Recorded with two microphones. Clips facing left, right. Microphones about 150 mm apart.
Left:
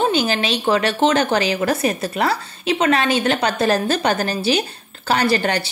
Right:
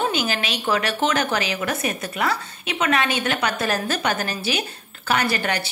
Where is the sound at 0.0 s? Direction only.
30° left (ahead or behind).